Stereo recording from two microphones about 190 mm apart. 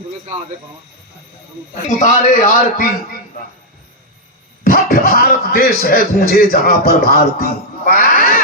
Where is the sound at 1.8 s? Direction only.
40° left (ahead or behind).